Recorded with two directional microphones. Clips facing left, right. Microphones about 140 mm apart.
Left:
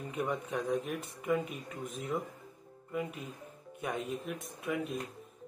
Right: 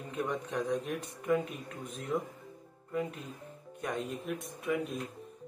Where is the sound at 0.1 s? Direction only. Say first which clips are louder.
Right 1 dB; 5° left (ahead or behind).